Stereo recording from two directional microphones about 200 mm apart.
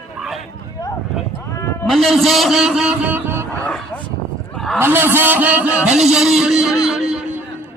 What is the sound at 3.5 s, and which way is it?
Bow-wow, 5° left (ahead or behind).